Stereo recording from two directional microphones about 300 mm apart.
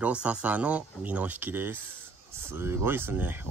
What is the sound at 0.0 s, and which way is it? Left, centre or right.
Speech, centre.